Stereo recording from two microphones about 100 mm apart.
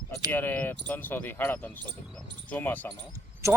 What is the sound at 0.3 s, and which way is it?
Speech, 20° left (ahead or behind).